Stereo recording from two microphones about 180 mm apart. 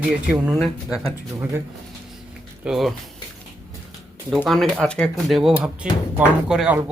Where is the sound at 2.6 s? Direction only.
Centre (ahead or behind).